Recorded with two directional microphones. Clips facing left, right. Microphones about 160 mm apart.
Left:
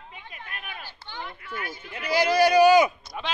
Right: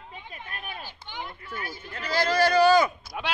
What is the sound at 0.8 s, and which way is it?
Speech, 15° right (ahead or behind).